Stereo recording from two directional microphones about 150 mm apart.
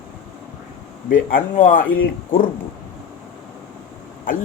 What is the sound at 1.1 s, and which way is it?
Speech, 70° left (ahead or behind).